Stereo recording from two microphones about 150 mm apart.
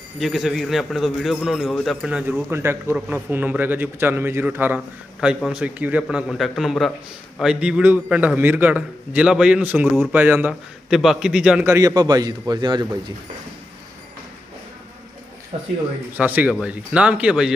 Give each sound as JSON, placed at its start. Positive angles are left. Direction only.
{"t": 0.2, "sound": "a man's voice", "side_deg": 0}
{"t": 10.9, "sound": "a man's voice", "side_deg": -5}
{"t": 11.7, "sound": "a man's voice", "side_deg": -25}
{"t": 15.5, "sound": "speech", "side_deg": -45}
{"t": 16.1, "sound": "a man's voice", "side_deg": -10}